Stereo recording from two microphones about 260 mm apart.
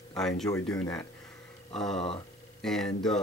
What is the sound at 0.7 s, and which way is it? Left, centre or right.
Speech, centre.